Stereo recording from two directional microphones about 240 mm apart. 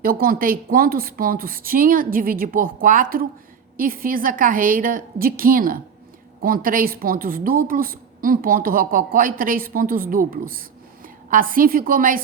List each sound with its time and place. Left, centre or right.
0.0 s a woman's voice: right